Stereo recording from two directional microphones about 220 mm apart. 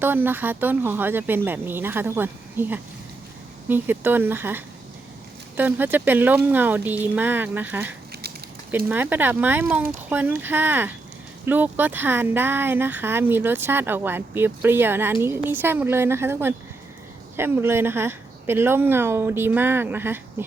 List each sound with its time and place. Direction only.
0.0 s speech: 10° right (ahead or behind)